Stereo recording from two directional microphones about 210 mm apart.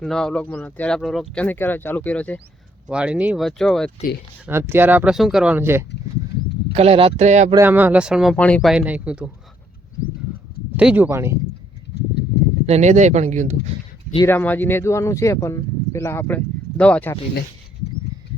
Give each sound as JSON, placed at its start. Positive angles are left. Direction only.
{"t": 0.0, "sound": "speech", "side_deg": 0}
{"t": 2.9, "sound": "speech", "side_deg": -5}
{"t": 4.4, "sound": "speech", "side_deg": -10}
{"t": 6.7, "sound": "speech", "side_deg": -25}
{"t": 7.5, "sound": "speech", "side_deg": -10}
{"t": 8.7, "sound": "speech", "side_deg": -5}
{"t": 10.8, "sound": "speech", "side_deg": -5}
{"t": 12.6, "sound": "speech", "side_deg": -30}
{"t": 14.3, "sound": "speech", "side_deg": 10}